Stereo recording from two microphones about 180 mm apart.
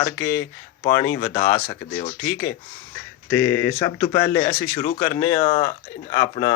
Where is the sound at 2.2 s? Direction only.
10° left (ahead or behind).